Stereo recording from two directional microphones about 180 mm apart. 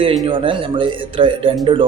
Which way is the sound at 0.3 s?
30° right (ahead or behind).